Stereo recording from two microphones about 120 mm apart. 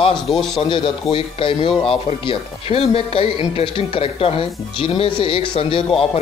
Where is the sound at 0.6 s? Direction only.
45° left (ahead or behind).